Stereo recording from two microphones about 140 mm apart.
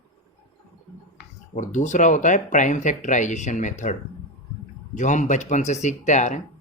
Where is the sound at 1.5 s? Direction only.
60° left (ahead or behind).